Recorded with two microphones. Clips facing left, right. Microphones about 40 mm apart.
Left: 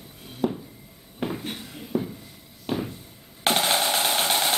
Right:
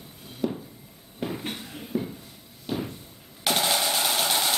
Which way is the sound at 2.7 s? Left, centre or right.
Left.